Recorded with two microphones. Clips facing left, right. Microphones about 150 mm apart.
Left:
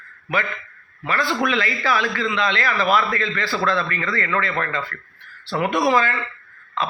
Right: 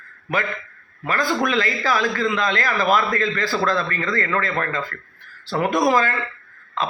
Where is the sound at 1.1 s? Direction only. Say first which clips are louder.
Right 1 dB; 45° right (ahead or behind).